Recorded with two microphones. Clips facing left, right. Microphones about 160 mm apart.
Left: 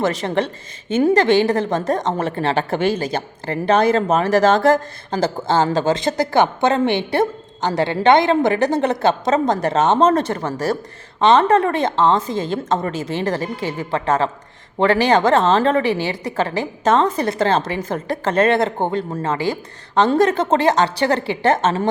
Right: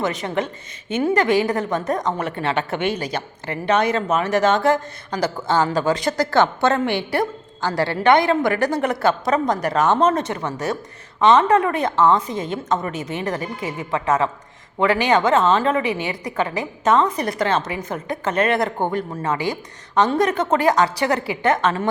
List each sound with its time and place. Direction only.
0.0 s a woman's voice: 35° left (ahead or behind)